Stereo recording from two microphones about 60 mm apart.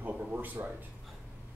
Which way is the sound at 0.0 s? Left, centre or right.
Right.